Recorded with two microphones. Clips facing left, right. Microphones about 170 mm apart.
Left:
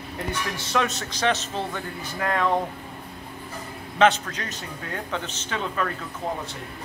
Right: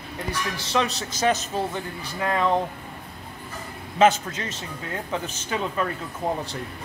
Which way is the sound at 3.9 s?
5° right (ahead or behind).